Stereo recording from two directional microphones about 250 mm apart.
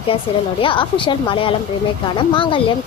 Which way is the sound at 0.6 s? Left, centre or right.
Left.